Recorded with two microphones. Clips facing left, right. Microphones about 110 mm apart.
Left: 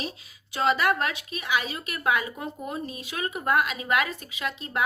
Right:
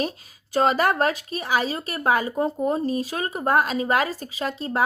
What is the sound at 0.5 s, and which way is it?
A woman's voice, 40° right (ahead or behind).